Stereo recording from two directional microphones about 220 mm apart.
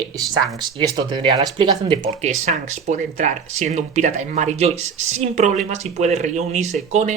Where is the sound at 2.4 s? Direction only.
35° right (ahead or behind).